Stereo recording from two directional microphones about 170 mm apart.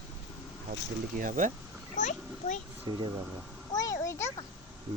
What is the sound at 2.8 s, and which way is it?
Speech, 20° right (ahead or behind).